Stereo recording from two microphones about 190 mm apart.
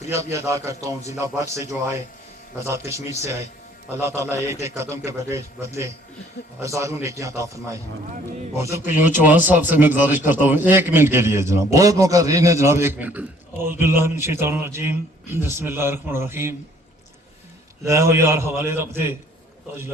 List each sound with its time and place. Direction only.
0.1 s a man's voice: 15° right (ahead or behind)
4.0 s a man's voice: 15° right (ahead or behind)
17.8 s a man's voice: 15° right (ahead or behind)